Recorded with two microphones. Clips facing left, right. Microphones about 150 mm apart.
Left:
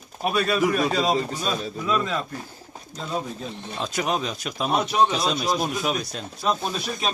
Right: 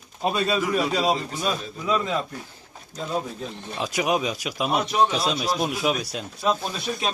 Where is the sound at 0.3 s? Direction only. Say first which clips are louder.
Even; 20° right (ahead or behind).